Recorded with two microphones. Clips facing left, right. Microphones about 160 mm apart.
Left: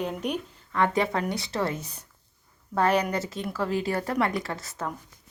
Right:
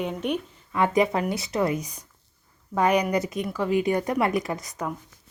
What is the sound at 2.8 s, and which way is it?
A woman's voice, 10° right (ahead or behind).